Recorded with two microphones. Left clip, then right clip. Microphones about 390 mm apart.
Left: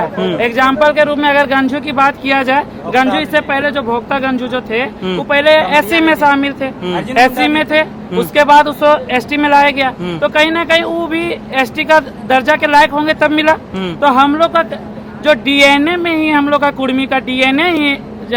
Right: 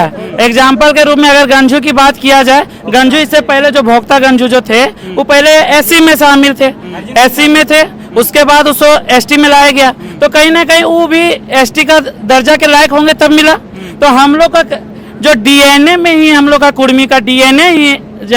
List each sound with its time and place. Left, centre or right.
0.3 s a man's voice: right
5.3 s a man's voice: right